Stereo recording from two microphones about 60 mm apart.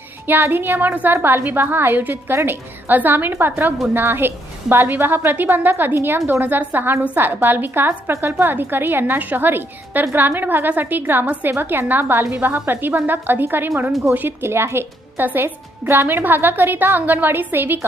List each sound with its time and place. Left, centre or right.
0.3 s a woman's voice: right
2.3 s a woman's voice: right
2.8 s a woman's voice: right
14.4 s a woman's voice: right